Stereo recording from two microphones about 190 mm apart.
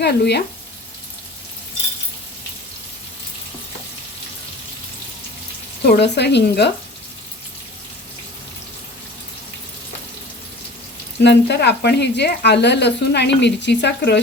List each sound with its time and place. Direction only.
0.0 s speech: 60° left (ahead or behind)
5.8 s speech: 60° left (ahead or behind)
11.2 s speech: 65° left (ahead or behind)